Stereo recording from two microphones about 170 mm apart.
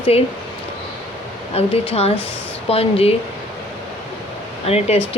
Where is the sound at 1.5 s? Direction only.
35° left (ahead or behind).